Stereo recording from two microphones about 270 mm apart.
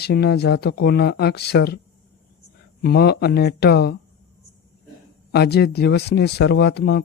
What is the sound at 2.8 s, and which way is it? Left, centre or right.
Speech, left.